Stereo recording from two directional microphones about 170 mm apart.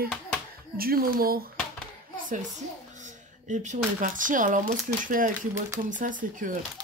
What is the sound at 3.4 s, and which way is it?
Speech, 45° right (ahead or behind).